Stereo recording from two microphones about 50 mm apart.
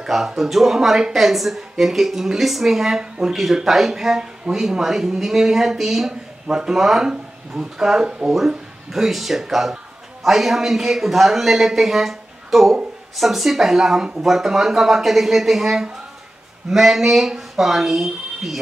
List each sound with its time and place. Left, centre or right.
0.0 s speech: centre